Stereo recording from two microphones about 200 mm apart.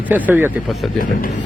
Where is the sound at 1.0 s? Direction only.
45° left (ahead or behind).